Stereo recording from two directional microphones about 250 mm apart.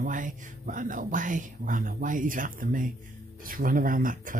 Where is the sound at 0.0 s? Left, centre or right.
Right.